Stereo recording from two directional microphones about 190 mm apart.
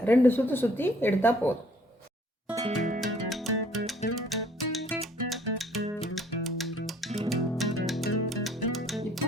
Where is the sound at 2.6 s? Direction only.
40° right (ahead or behind).